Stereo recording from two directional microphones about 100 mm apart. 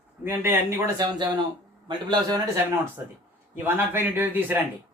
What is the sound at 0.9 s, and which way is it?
Speech, 45° right (ahead or behind).